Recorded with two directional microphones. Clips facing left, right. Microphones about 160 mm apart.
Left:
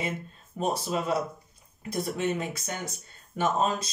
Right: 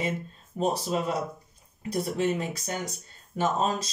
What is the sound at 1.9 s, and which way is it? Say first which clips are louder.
Speech: right 2 dB; 35° right (ahead or behind).